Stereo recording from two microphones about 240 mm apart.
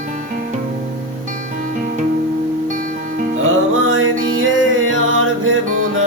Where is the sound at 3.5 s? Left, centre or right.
Right.